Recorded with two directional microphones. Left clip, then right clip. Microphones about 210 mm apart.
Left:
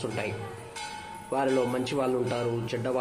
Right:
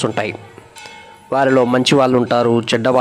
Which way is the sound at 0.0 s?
50° right (ahead or behind).